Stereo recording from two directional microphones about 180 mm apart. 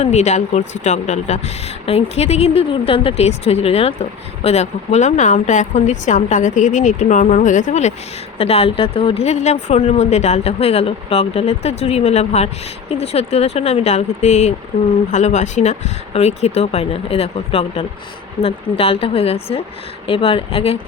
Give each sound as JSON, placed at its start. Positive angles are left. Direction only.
{"t": 0.0, "sound": "speech", "side_deg": 40}